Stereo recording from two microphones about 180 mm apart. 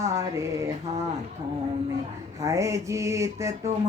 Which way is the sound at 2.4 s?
15° right (ahead or behind).